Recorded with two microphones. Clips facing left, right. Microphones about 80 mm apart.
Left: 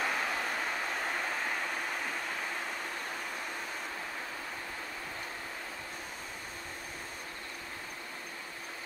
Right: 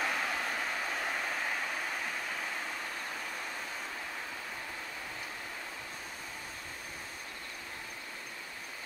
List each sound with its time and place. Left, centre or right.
0.0 s vehicle: centre